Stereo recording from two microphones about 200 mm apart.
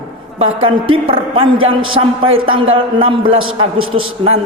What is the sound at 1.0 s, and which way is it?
A man's voice, 25° right (ahead or behind).